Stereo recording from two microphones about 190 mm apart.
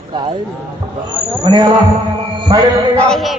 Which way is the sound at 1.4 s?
25° right (ahead or behind).